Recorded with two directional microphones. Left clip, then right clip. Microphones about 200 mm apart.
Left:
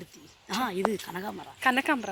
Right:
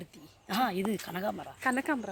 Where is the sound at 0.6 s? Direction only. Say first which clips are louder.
Left 2 dB; 45° right (ahead or behind).